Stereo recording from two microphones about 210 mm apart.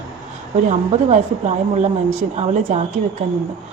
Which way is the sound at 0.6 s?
35° right (ahead or behind).